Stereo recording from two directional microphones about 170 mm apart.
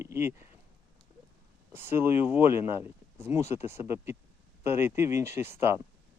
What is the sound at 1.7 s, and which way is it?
Speech, 15° right (ahead or behind).